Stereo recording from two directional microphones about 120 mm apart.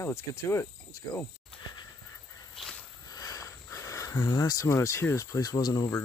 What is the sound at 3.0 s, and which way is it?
Speech, 30° left (ahead or behind).